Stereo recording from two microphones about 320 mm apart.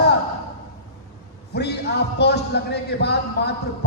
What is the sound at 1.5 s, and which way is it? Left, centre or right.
Speech, left.